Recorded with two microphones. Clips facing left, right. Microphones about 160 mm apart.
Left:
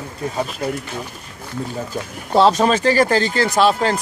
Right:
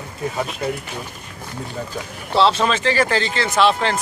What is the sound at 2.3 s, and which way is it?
Speech, 45° left (ahead or behind).